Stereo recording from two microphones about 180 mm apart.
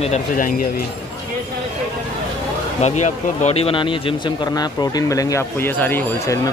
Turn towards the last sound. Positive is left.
turn(degrees=15)  # may be behind; listen again after turning